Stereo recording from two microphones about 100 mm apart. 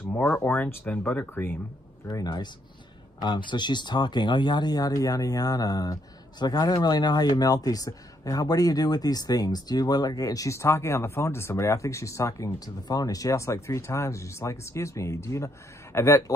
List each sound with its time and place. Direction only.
0.0 s speech: 20° left (ahead or behind)
2.0 s speech: 45° left (ahead or behind); by 16.3 s 30° left (ahead or behind)